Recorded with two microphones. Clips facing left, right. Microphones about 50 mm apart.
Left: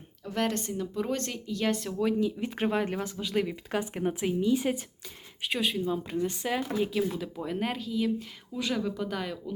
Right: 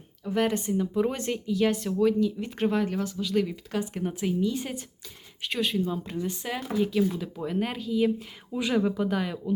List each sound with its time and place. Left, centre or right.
0.3 s speech: centre
2.0 s speech: centre
2.8 s speech: left; by 8.0 s centre
8.2 s speech: centre